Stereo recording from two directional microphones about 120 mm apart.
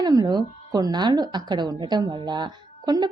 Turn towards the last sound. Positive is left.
turn(degrees=-35)  # may be behind; listen again after turning